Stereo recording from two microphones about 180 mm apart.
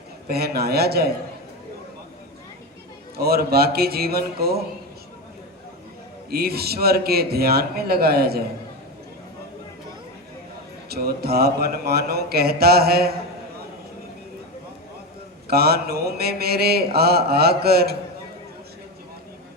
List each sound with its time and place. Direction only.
0.3 s mantra: 60° right (ahead or behind)
3.2 s mantra: 60° right (ahead or behind)
6.3 s mantra: 60° right (ahead or behind)
10.8 s mantra: 60° right (ahead or behind)
15.4 s mantra: 60° right (ahead or behind)